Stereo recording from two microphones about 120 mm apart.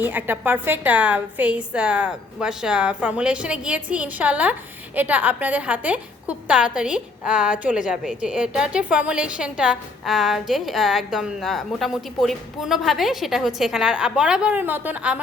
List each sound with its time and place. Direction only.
0.0 s a woman's voice: 15° right (ahead or behind)